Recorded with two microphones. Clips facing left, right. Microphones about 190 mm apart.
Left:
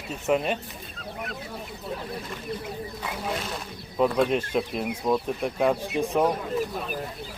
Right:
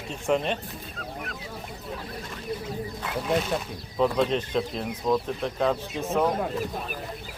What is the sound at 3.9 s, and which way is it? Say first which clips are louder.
Speech: left 1 dB; 5° left (ahead or behind).